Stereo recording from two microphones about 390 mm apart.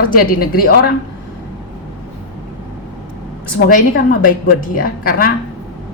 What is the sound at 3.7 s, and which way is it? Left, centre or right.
A woman's voice, left.